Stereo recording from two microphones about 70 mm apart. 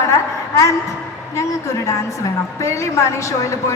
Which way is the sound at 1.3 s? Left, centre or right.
Left.